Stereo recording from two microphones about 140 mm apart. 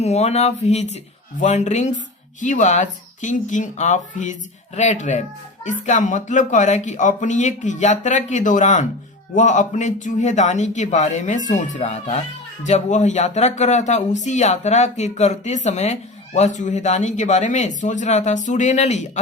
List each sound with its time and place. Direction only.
0.0 s speech: 50° left (ahead or behind)